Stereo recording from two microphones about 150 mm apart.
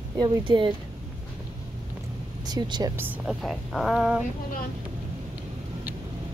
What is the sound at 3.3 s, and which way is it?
Speech, centre (ahead or behind).